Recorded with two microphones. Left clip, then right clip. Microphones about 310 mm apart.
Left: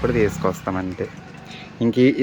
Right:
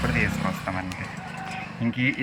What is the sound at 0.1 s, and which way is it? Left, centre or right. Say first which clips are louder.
Speech: left 6 dB; centre.